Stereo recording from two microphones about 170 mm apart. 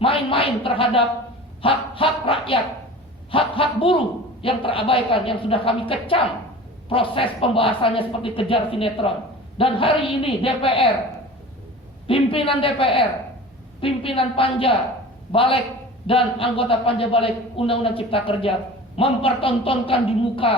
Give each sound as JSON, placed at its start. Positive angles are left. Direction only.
{"t": 0.0, "sound": "a sound", "side_deg": 30}
{"t": 1.6, "sound": "a man's voice", "side_deg": 30}
{"t": 12.0, "sound": "a man's voice", "side_deg": 30}